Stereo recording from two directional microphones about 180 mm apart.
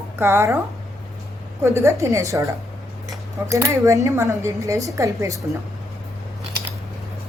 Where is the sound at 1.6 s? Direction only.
15° right (ahead or behind).